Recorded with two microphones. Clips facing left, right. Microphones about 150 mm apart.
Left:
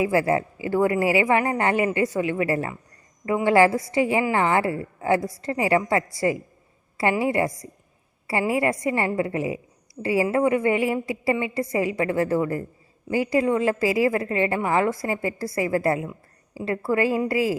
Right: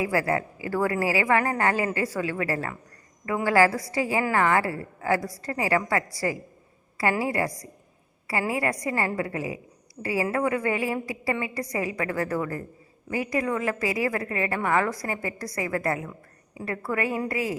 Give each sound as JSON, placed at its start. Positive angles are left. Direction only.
{"t": 0.0, "sound": "a woman's voice", "side_deg": 25}